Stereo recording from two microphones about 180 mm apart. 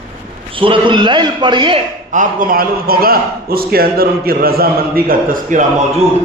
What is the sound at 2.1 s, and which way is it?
A man's voice, 50° right (ahead or behind).